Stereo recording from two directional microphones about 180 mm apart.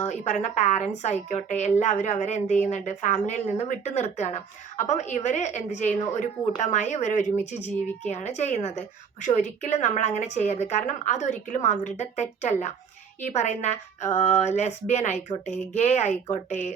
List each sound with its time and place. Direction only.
0.0 s a woman's voice: 40° left (ahead or behind)